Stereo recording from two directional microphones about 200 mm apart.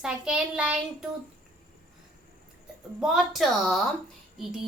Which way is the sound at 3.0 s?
Centre (ahead or behind).